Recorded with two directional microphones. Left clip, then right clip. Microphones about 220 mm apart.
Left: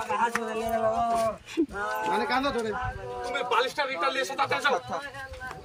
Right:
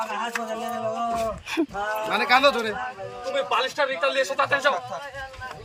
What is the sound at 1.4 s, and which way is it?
Speech, 5° left (ahead or behind).